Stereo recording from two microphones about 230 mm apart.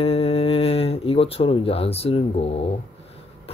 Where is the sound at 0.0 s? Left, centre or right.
Left.